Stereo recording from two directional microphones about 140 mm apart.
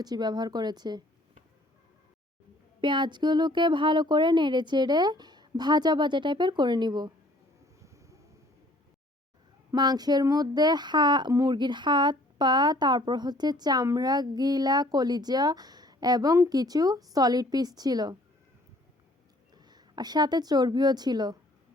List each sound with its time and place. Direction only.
0.0 s speech: 30° right (ahead or behind)
2.8 s speech: 35° right (ahead or behind)
9.7 s speech: 30° right (ahead or behind)
19.5 s a woman's voice: 30° right (ahead or behind)